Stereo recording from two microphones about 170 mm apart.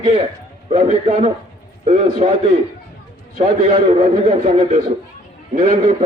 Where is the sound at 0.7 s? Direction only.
40° right (ahead or behind).